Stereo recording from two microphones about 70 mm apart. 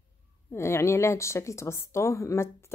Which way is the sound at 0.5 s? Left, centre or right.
Left.